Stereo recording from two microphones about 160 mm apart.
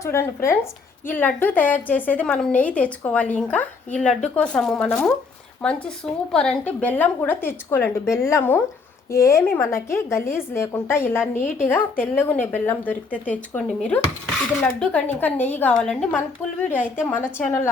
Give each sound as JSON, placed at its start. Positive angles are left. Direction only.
{"t": 0.0, "sound": "a woman's voice", "side_deg": 15}
{"t": 16.7, "sound": "a woman's voice", "side_deg": -10}
{"t": 17.1, "sound": "a woman's voice", "side_deg": 10}